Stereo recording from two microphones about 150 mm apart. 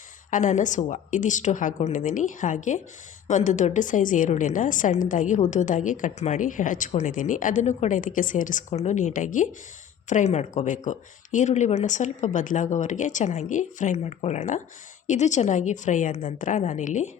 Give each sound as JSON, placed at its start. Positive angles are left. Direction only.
{"t": 0.3, "sound": "a woman's voice", "side_deg": 55}